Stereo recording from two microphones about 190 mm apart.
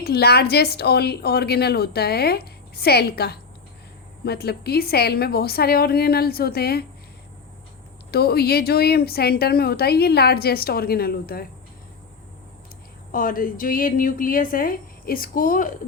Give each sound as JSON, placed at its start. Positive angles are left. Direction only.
{"t": 0.0, "sound": "speech", "side_deg": 55}
{"t": 8.1, "sound": "speech", "side_deg": 55}
{"t": 13.1, "sound": "speech", "side_deg": 45}